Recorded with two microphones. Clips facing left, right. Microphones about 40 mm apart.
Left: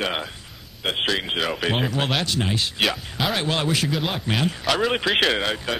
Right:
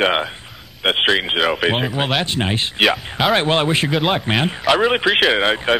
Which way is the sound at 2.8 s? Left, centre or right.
Right.